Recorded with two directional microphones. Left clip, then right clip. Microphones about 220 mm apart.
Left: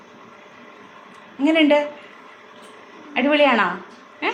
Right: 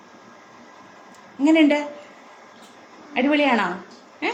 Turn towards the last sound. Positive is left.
turn(degrees=-10)  # may be behind; listen again after turning